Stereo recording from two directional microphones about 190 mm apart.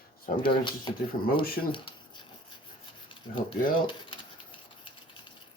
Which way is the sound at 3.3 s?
25° left (ahead or behind).